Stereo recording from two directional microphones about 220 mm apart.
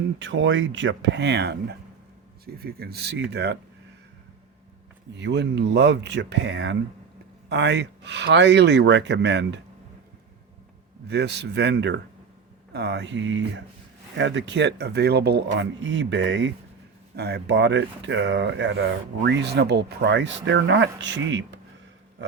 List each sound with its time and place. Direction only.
0.2 s speech: 60° right (ahead or behind)
5.1 s speech: 50° right (ahead or behind)
11.1 s speech: 50° right (ahead or behind)